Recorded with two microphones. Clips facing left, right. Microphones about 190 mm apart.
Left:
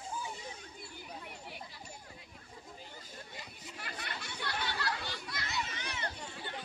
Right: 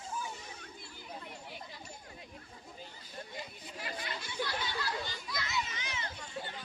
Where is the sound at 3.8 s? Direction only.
65° left (ahead or behind).